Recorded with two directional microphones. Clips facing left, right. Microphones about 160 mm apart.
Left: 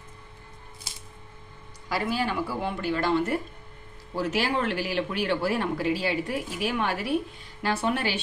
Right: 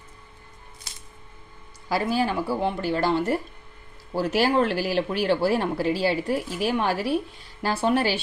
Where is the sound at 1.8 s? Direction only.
35° right (ahead or behind).